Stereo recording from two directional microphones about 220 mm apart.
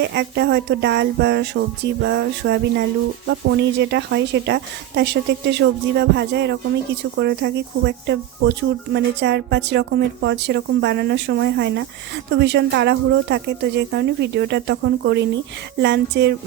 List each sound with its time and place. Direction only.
0.0 s speech: 50° right (ahead or behind)